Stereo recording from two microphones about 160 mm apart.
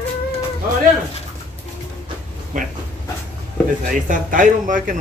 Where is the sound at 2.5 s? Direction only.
55° right (ahead or behind).